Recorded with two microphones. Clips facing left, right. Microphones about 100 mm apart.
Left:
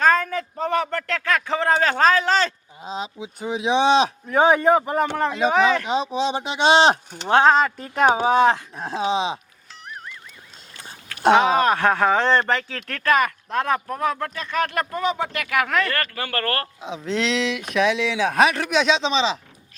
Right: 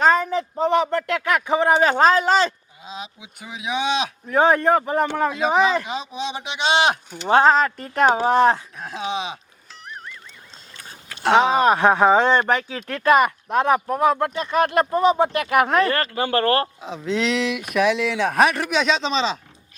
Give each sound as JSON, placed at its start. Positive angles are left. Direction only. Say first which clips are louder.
{"t": 0.0, "sound": "speech", "louder": "right 1 dB", "side_deg": -15}
{"t": 2.8, "sound": "speech", "louder": "left 6 dB", "side_deg": 35}
{"t": 4.3, "sound": "speech", "louder": "right 1 dB", "side_deg": 0}
{"t": 5.9, "sound": "speech", "louder": "left 6 dB", "side_deg": 30}
{"t": 7.3, "sound": "speech", "louder": "even", "side_deg": -5}
{"t": 8.7, "sound": "speech", "louder": "left 4 dB", "side_deg": 30}
{"t": 9.8, "sound": "music", "louder": "even", "side_deg": 5}
{"t": 11.3, "sound": "speech", "louder": "right 1 dB", "side_deg": -20}
{"t": 16.8, "sound": "speech", "louder": "right 1 dB", "side_deg": 0}